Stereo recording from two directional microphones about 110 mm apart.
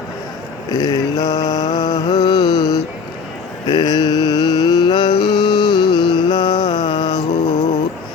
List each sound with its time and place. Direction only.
0.7 s mantra: 35° left (ahead or behind)
3.7 s mantra: 40° left (ahead or behind)
7.6 s music: 90° left